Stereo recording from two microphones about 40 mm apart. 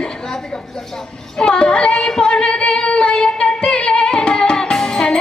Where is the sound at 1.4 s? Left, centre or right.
Left.